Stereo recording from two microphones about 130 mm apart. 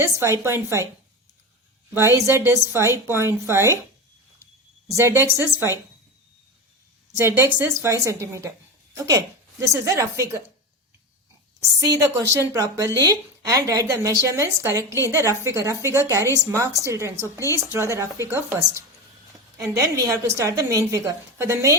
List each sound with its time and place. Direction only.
0.0 s a woman's voice: 20° right (ahead or behind)
1.9 s a woman's voice: 20° right (ahead or behind)
4.9 s a woman's voice: 20° right (ahead or behind)
7.2 s a woman's voice: 20° right (ahead or behind)
11.8 s a woman's voice: 25° right (ahead or behind)
19.5 s a woman's voice: 25° right (ahead or behind)